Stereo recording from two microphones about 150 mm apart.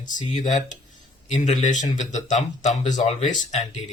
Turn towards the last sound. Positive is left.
turn(degrees=55)  # may be behind; listen again after turning